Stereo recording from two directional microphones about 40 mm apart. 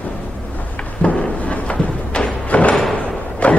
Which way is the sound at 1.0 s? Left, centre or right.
Left.